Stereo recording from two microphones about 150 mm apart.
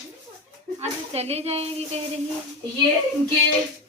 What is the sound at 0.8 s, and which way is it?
A woman's voice, 45° right (ahead or behind).